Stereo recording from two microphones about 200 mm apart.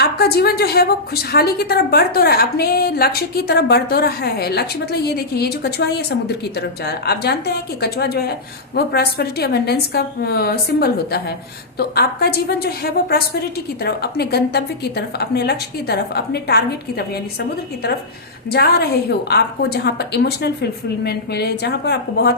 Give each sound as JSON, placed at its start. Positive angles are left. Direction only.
{"t": 0.0, "sound": "a woman's voice", "side_deg": 55}
{"t": 18.5, "sound": "a woman's voice", "side_deg": 50}